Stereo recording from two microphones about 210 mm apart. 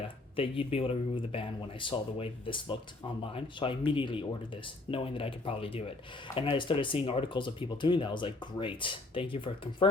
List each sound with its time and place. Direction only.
0.3 s speech: 25° left (ahead or behind)